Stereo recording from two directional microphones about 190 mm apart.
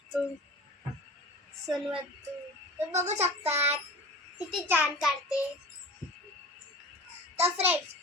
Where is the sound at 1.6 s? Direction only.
Centre (ahead or behind).